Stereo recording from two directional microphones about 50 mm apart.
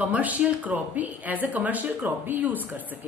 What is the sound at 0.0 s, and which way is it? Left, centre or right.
Speech, right.